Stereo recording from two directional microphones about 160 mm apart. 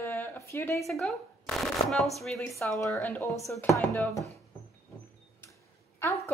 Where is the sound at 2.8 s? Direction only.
15° left (ahead or behind).